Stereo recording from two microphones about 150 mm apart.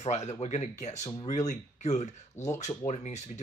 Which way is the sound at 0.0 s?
45° left (ahead or behind).